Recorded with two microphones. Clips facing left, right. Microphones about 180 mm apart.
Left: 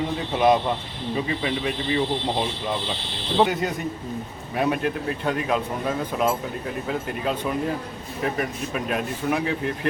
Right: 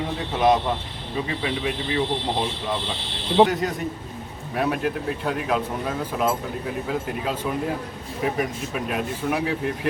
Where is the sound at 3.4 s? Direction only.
Centre (ahead or behind).